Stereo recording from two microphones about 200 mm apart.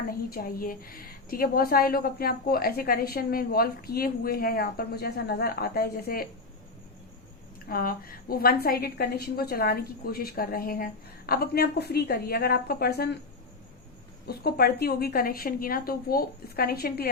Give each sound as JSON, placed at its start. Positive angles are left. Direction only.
{"t": 0.3, "sound": "a woman's voice", "side_deg": 50}
{"t": 7.7, "sound": "a woman's voice", "side_deg": 45}
{"t": 14.3, "sound": "a woman's voice", "side_deg": 50}